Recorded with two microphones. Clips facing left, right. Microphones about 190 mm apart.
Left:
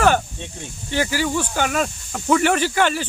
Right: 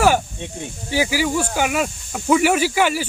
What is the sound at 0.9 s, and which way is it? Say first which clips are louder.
Speech: right 2 dB; 10° right (ahead or behind).